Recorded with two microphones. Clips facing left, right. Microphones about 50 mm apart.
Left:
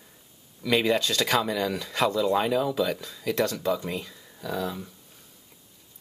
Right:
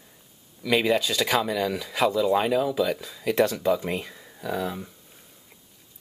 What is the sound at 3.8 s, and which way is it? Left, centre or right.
Speech, right.